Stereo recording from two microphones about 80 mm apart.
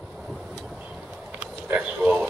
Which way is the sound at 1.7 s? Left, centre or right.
Centre.